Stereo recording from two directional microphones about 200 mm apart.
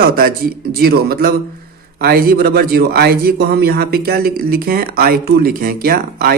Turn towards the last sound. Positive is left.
turn(degrees=-50)  # may be behind; listen again after turning